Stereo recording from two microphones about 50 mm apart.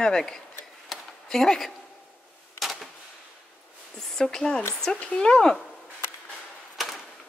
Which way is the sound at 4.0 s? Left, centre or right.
Centre.